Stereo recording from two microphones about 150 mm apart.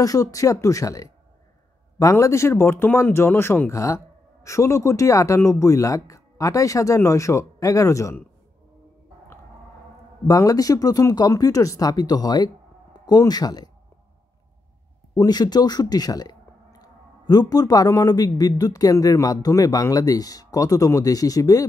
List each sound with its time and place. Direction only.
0.0 s speech: 25° left (ahead or behind)
10.2 s speech: 25° left (ahead or behind)
15.1 s speech: 25° left (ahead or behind)